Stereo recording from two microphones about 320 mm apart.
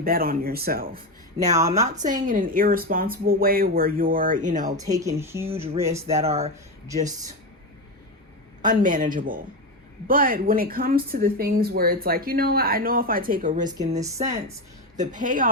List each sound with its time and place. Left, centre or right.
0.0 s speech: right
1.5 s speech: centre
2.2 s speech: right
4.6 s speech: centre
6.1 s speech: centre
8.6 s speech: right
13.7 s speech: centre